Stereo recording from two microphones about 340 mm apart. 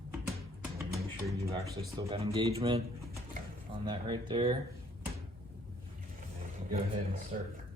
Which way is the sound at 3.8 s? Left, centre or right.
Centre.